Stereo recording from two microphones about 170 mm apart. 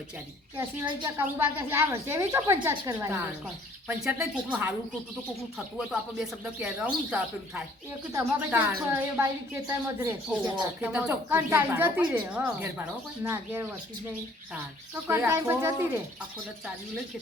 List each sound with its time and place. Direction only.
0.5 s a woman's voice: 20° right (ahead or behind)
15.0 s a woman's voice: 15° right (ahead or behind)